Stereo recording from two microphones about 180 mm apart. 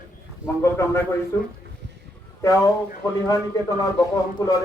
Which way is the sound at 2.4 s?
15° left (ahead or behind).